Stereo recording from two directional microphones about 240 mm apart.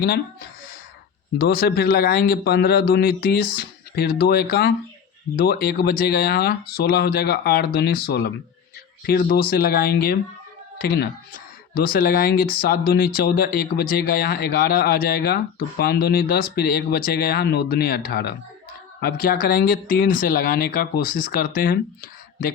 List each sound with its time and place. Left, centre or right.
1.4 s speech: left